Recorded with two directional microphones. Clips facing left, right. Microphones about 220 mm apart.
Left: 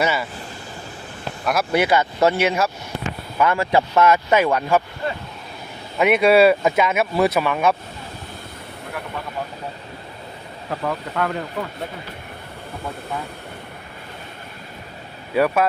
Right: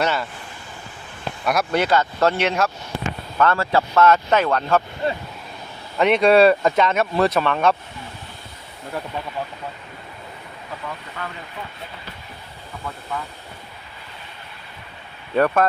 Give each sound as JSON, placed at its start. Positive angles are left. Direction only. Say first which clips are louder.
{"t": 0.0, "sound": "speech", "louder": "left 1 dB", "side_deg": 5}
{"t": 1.5, "sound": "speech", "louder": "left 1 dB", "side_deg": 5}
{"t": 6.0, "sound": "speech", "louder": "even", "side_deg": 5}
{"t": 10.7, "sound": "speech", "louder": "left 9 dB", "side_deg": 60}
{"t": 15.4, "sound": "speech", "louder": "even", "side_deg": 10}